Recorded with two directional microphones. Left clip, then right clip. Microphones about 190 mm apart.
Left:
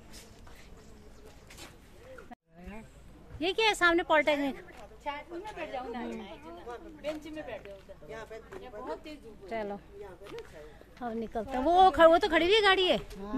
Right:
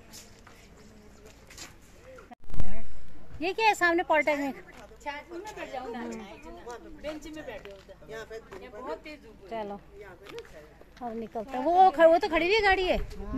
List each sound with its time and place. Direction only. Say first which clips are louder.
3.3 s a woman's voice: right 2 dB; centre (ahead or behind)
5.0 s a woman's voice: even; 60° right (ahead or behind)
9.5 s a woman's voice: even; 5° left (ahead or behind)
11.0 s a woman's voice: even; 10° left (ahead or behind)